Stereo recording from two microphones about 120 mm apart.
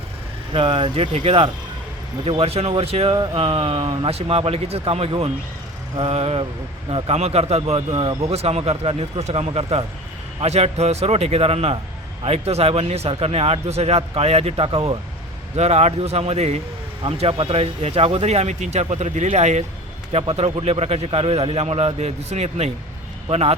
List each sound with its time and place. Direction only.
0.5 s a man's voice: 50° right (ahead or behind)
15.5 s a man's voice: 60° right (ahead or behind)
20.1 s a man's voice: 60° right (ahead or behind)